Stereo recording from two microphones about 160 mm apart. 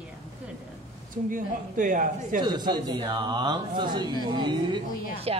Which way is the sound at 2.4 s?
25° right (ahead or behind).